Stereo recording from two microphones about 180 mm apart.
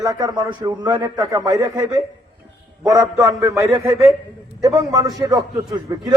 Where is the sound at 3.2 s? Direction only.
20° right (ahead or behind).